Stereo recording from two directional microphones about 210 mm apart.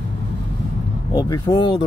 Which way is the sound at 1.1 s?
20° left (ahead or behind).